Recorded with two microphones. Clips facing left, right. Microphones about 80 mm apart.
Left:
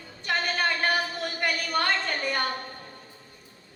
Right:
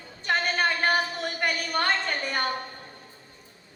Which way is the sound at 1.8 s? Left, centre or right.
Right.